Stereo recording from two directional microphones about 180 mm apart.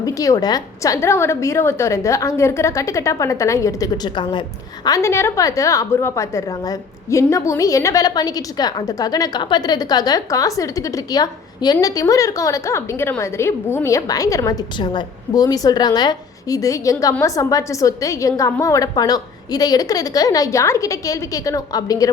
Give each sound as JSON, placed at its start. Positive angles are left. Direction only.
{"t": 0.0, "sound": "a woman's voice", "side_deg": 20}